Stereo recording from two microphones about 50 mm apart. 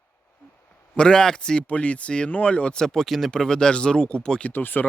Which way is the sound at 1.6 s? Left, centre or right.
Left.